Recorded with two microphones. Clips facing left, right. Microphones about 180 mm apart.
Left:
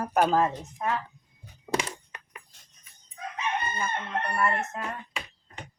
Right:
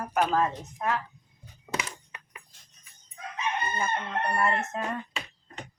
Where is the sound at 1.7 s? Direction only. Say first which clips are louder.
Left 5 dB; 35° left (ahead or behind).